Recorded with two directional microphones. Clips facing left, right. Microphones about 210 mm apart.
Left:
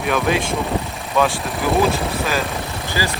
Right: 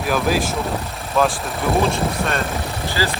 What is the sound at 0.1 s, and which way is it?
Speech, centre (ahead or behind).